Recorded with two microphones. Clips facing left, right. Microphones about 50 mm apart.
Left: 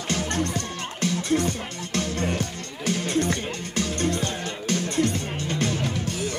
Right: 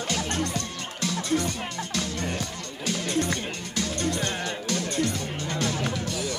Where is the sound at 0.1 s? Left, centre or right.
Left.